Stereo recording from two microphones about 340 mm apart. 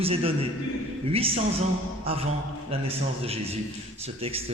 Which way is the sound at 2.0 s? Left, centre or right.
Centre.